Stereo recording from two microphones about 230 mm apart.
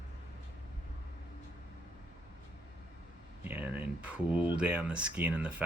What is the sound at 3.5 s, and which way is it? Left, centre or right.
Speech, centre.